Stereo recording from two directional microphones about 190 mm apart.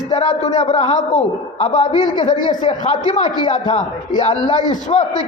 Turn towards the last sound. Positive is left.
turn(degrees=35)  # may be behind; listen again after turning